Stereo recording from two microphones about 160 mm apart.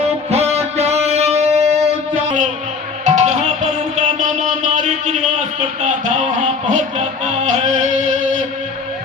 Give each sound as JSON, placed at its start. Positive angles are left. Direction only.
{"t": 0.0, "sound": "music", "side_deg": -40}
{"t": 3.0, "sound": "music", "side_deg": -50}